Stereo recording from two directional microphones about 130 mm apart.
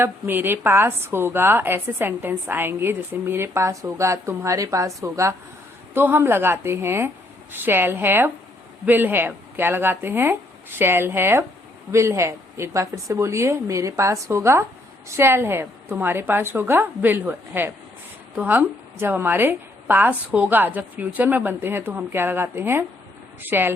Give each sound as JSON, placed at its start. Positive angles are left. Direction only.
{"t": 0.0, "sound": "a woman's voice", "side_deg": -15}